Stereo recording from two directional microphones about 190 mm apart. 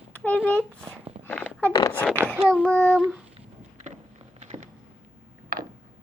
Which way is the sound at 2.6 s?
10° left (ahead or behind).